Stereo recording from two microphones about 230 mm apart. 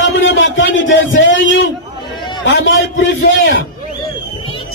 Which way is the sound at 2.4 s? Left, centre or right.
Left.